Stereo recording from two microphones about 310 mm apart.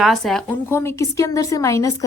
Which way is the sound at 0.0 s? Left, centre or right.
Centre.